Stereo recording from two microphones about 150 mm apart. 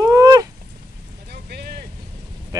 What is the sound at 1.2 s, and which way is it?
Vehicle, 90° right.